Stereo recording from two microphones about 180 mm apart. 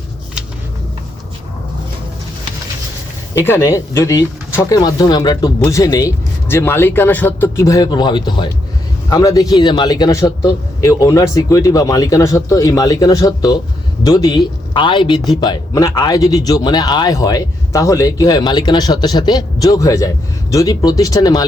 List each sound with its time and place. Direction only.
3.3 s speech: 15° left (ahead or behind)